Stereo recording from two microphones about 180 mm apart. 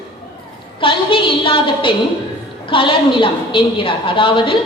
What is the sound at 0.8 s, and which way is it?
A woman's voice, 30° left (ahead or behind).